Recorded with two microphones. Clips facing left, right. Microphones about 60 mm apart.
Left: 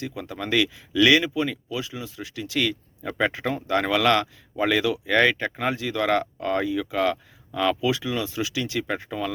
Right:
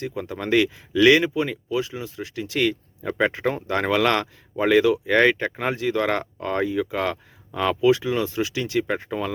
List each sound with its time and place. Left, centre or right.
0.0 s speech: right
3.0 s speech: right
8.8 s speech: right